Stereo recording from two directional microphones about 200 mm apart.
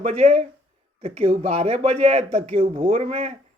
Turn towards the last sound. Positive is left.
turn(degrees=-30)  # may be behind; listen again after turning